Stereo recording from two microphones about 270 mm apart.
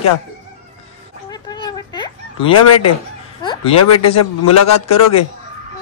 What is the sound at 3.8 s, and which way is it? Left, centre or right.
Speech, left.